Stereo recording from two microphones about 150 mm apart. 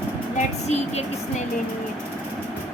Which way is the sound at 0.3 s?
50° left (ahead or behind).